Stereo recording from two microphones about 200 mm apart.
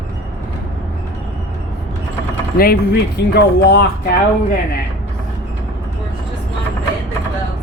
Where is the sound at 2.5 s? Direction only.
50° left (ahead or behind).